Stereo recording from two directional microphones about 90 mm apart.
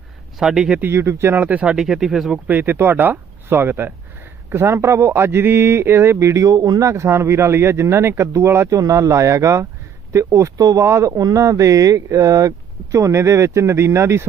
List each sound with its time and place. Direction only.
0.3 s speech: 5° right (ahead or behind)
0.8 s speech: 30° right (ahead or behind); by 2.4 s 5° right (ahead or behind)
2.5 s a man's voice: 20° right (ahead or behind)